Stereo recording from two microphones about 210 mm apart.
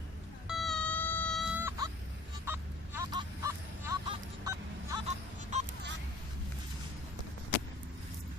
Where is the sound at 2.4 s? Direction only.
10° right (ahead or behind).